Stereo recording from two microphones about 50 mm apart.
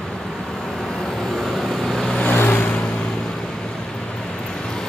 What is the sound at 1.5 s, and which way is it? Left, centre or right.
Vehicle, centre.